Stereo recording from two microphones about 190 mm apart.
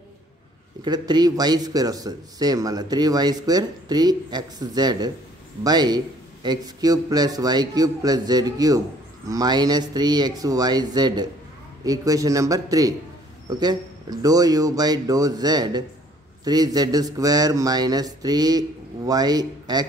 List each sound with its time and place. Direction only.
0.8 s a man's voice: 20° right (ahead or behind)